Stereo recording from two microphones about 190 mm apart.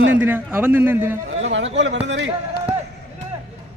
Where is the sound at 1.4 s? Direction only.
75° right (ahead or behind).